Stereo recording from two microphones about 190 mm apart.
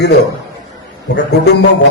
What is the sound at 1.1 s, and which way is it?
Speech, 60° left (ahead or behind).